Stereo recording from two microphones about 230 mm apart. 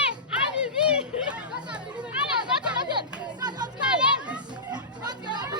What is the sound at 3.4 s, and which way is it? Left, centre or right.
Children playing, centre.